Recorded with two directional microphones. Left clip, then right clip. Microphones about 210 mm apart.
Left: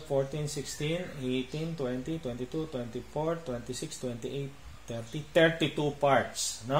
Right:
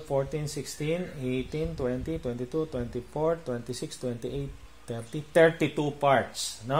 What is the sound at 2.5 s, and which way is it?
Speech, 45° right (ahead or behind).